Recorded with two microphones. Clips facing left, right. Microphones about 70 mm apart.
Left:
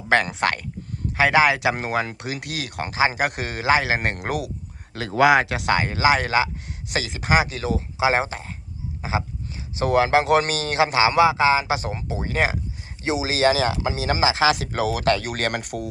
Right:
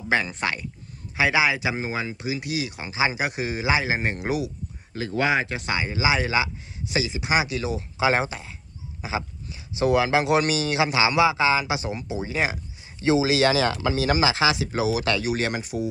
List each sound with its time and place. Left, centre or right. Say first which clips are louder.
0.1 s speech: left 4 dB; left
3.8 s speech: left 1 dB; left
4.9 s speech: left 6 dB; left
5.7 s speech: left 4 dB; left
7.9 s speech: left 1 dB; left
9.7 s speech: left 2 dB; left
13.0 s speech: right 2 dB; left
14.5 s speech: even; left